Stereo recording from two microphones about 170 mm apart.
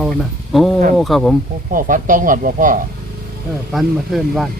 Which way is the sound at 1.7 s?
55° right (ahead or behind).